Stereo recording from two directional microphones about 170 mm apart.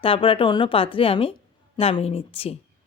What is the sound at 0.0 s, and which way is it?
Speech, 30° left (ahead or behind).